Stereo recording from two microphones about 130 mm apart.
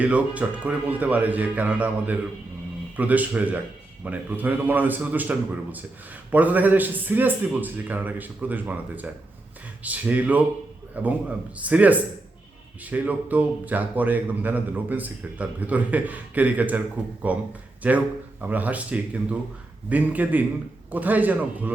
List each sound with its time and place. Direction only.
0.0 s speech: 10° right (ahead or behind)